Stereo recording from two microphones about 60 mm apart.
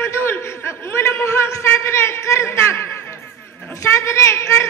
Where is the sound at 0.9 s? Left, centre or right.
Left.